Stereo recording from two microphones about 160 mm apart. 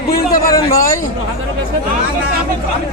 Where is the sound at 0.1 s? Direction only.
70° left (ahead or behind).